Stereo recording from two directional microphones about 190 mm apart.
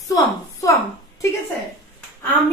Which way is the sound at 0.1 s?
15° left (ahead or behind).